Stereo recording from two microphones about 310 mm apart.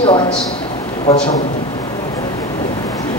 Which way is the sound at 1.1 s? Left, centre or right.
Left.